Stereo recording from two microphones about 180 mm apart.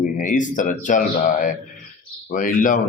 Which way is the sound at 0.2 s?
45° left (ahead or behind).